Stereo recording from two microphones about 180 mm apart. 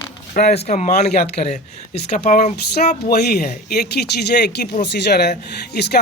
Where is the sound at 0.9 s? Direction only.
60° left (ahead or behind).